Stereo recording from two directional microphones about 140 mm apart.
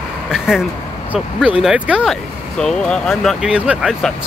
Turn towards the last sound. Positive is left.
turn(degrees=-5)  # may be behind; listen again after turning